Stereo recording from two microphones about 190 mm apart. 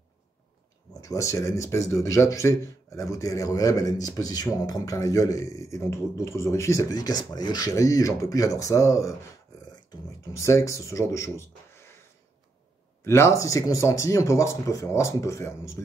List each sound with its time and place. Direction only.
1.0 s a man's voice: 15° left (ahead or behind)
10.3 s speech: 15° left (ahead or behind)
13.0 s a man's voice: 15° left (ahead or behind)